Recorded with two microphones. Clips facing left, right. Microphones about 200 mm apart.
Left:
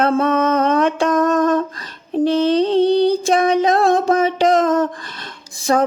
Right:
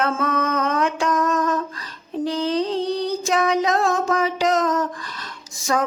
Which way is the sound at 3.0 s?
30° left (ahead or behind).